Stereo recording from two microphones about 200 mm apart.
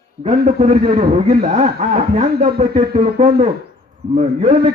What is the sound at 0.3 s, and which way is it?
A man's voice, 35° right (ahead or behind).